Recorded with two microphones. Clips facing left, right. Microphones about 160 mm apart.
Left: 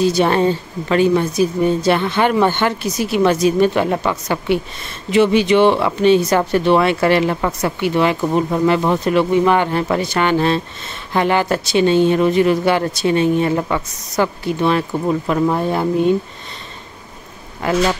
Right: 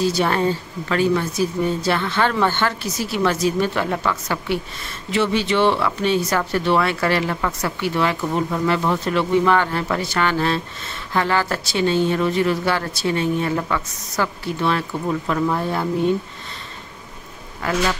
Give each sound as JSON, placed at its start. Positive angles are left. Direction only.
{"t": 0.0, "sound": "speech", "side_deg": 20}
{"t": 17.6, "sound": "speech", "side_deg": 25}